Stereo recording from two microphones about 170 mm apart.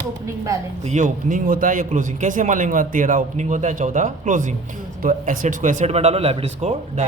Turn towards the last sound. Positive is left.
turn(degrees=-35)  # may be behind; listen again after turning